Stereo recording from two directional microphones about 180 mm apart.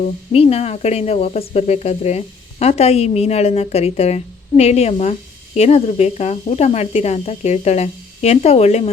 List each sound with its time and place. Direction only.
0.0 s speech: 35° left (ahead or behind)